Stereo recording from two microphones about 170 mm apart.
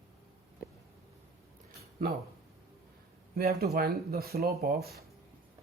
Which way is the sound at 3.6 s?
60° right (ahead or behind).